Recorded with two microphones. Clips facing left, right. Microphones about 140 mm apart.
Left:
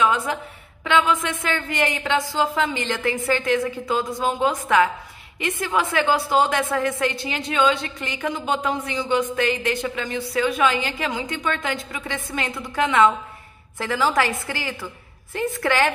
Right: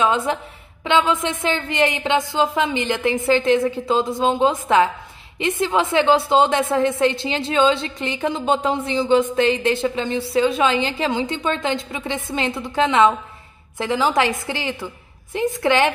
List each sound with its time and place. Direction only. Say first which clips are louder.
0.0 s a woman's voice: right 2 dB; 25° right (ahead or behind)